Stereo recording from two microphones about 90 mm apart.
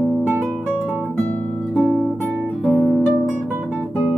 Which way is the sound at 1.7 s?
20° right (ahead or behind).